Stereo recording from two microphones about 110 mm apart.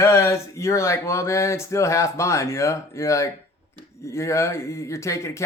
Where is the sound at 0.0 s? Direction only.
25° left (ahead or behind).